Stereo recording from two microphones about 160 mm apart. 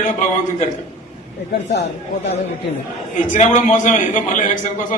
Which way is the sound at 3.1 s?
50° left (ahead or behind).